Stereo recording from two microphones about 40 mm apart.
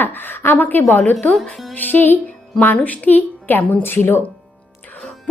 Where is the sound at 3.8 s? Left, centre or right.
Left.